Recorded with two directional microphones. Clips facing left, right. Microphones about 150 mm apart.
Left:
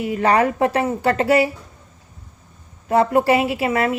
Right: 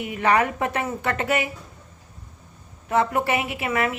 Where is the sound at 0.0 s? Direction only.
35° left (ahead or behind).